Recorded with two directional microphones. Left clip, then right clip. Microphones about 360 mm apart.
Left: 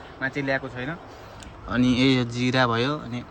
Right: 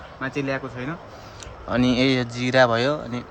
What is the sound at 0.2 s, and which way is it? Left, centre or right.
Speech, centre.